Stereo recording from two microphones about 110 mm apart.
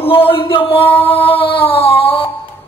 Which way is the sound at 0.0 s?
55° left (ahead or behind).